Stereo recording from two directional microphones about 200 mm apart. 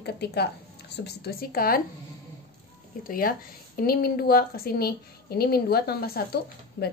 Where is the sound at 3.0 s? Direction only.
45° left (ahead or behind).